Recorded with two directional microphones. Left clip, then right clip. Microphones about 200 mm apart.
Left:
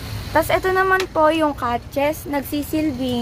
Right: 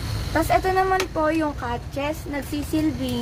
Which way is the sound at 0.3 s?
45° left (ahead or behind).